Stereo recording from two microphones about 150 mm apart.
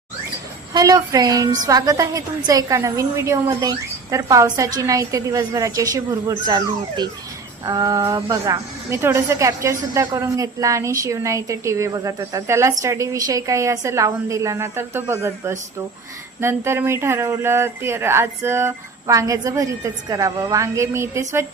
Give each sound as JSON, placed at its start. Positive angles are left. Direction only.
{"t": 0.7, "sound": "speech", "side_deg": -25}